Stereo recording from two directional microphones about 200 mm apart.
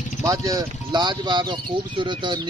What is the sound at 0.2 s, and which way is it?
Speech, 15° right (ahead or behind).